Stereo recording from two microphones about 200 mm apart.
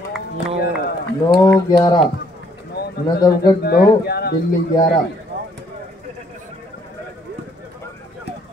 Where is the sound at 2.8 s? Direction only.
55° left (ahead or behind).